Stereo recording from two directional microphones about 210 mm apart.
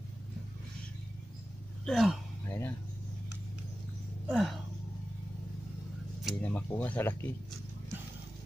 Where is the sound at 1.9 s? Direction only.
Centre (ahead or behind).